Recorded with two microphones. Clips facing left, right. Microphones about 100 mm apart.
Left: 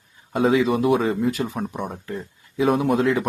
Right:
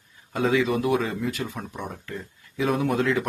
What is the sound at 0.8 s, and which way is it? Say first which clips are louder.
Speech: left 5 dB; 35° left (ahead or behind).